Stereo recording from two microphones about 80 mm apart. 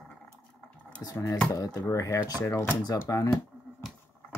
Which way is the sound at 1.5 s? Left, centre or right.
Left.